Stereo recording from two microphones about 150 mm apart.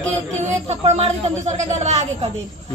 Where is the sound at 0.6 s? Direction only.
45° right (ahead or behind).